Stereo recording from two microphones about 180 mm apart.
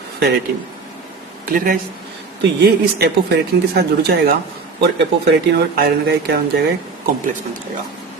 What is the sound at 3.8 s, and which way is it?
Speech, 60° right (ahead or behind).